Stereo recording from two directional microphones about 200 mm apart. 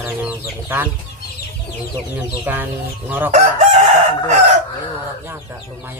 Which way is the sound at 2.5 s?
10° right (ahead or behind).